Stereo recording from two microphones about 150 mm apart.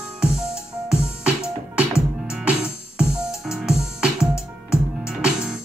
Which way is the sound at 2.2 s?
5° right (ahead or behind).